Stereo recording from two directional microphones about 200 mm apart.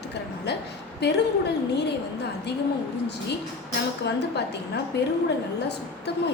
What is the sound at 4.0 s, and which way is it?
Speech, 55° left (ahead or behind).